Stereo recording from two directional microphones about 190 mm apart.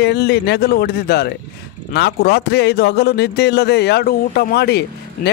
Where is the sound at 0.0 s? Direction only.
60° left (ahead or behind).